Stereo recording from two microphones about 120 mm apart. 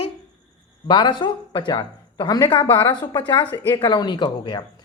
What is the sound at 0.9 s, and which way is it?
Speech, 40° left (ahead or behind).